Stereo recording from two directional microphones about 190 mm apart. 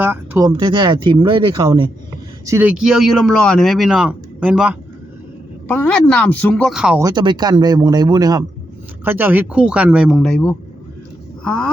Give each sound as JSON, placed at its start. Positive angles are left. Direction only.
{"t": 0.0, "sound": "speech", "side_deg": -15}
{"t": 0.5, "sound": "speech", "side_deg": -25}
{"t": 2.5, "sound": "speech", "side_deg": -10}
{"t": 5.6, "sound": "speech", "side_deg": 5}
{"t": 7.0, "sound": "speech", "side_deg": -25}